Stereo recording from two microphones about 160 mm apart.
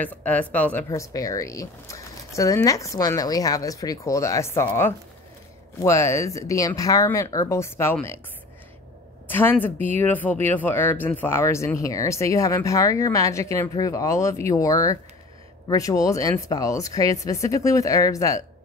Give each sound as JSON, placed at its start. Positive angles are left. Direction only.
{"t": 0.0, "sound": "speech", "side_deg": 10}
{"t": 0.8, "sound": "speech", "side_deg": 20}
{"t": 9.3, "sound": "speech", "side_deg": 15}